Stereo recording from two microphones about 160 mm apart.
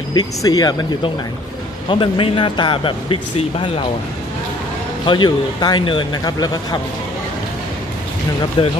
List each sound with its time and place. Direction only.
0.1 s speech: 25° left (ahead or behind)
5.0 s speech: 30° left (ahead or behind)
8.6 s speech: 30° left (ahead or behind)